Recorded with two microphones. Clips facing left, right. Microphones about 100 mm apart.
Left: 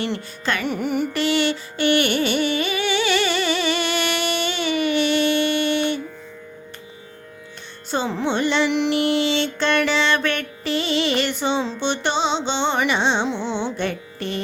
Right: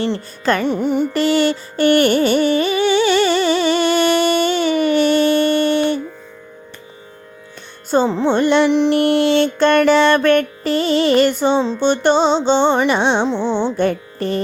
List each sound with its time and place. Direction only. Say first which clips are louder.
0.4 s carnatic music: right 7 dB; 40° right (ahead or behind)
0.7 s carnatic music: right 6 dB; 25° right (ahead or behind)
1.1 s carnatic music: right 5 dB; 40° right (ahead or behind)
7.9 s music: right 7 dB; 45° right (ahead or behind)
8.9 s mantra: right 6 dB; 50° right (ahead or behind)
11.8 s music: right 8 dB; 45° right (ahead or behind)
12.9 s music: right 5 dB; 50° right (ahead or behind)
13.7 s music: right 8 dB; 40° right (ahead or behind)